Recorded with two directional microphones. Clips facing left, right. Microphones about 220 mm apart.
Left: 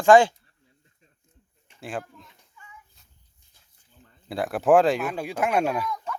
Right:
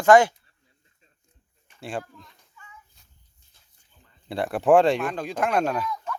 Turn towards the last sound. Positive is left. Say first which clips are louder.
# even
turn(degrees=10)  # may be behind; listen again after turning